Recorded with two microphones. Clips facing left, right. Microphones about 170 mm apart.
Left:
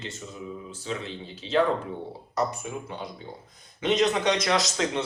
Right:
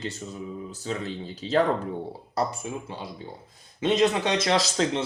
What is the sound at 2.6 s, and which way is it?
Speech, 30° right (ahead or behind).